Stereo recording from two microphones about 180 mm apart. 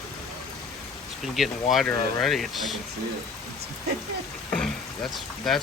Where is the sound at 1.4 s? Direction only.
Centre (ahead or behind).